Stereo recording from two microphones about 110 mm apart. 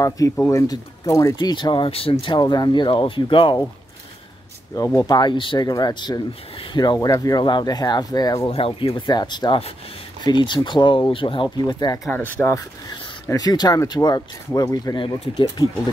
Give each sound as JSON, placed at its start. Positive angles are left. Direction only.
{"t": 0.5, "sound": "speech", "side_deg": 30}
{"t": 1.4, "sound": "speech", "side_deg": 40}
{"t": 4.7, "sound": "speech", "side_deg": 30}
{"t": 5.6, "sound": "speech", "side_deg": 35}
{"t": 8.5, "sound": "speech", "side_deg": 60}
{"t": 12.1, "sound": "speech", "side_deg": 15}
{"t": 13.3, "sound": "speech", "side_deg": 35}